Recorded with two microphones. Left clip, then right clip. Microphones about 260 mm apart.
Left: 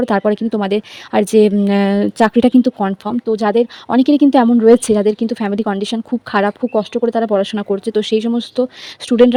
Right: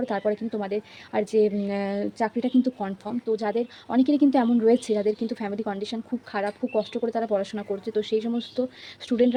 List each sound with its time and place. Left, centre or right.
0.0 s speech: left